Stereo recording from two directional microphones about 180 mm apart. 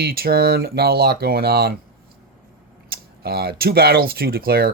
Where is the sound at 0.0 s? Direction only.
60° right (ahead or behind).